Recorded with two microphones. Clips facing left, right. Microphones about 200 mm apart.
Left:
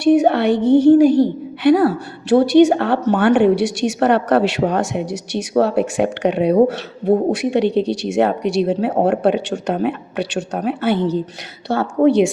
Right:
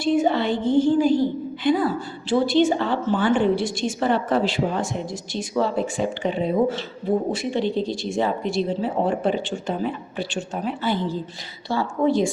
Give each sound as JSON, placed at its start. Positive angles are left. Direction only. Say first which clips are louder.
{"t": 0.0, "sound": "a woman's voice", "louder": "left 7 dB", "side_deg": 65}